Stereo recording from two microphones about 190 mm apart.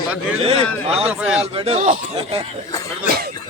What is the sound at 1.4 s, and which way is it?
Speech, 30° right (ahead or behind).